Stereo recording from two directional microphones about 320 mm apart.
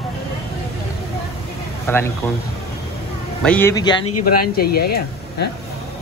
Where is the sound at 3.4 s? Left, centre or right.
Centre.